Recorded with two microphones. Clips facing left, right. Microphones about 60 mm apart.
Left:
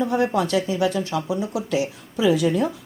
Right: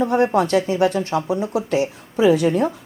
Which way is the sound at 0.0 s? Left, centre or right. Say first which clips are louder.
Right 4 dB; right.